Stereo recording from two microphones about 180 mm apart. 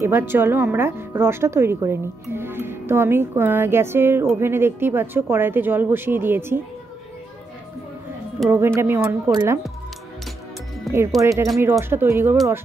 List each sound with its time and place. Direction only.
0.0 s speech: 10° right (ahead or behind)
8.5 s speech: 15° right (ahead or behind)
11.1 s speech: 20° right (ahead or behind)